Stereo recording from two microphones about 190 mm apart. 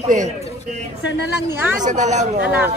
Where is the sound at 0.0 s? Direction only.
40° right (ahead or behind).